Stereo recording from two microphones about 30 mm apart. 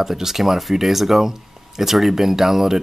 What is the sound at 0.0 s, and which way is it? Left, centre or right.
Speech, centre.